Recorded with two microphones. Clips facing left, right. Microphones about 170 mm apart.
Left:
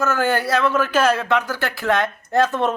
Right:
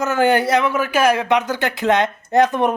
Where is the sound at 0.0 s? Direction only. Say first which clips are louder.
Right 4 dB; 20° right (ahead or behind).